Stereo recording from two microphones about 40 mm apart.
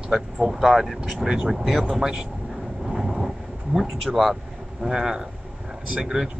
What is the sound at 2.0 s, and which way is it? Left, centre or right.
Speech, centre.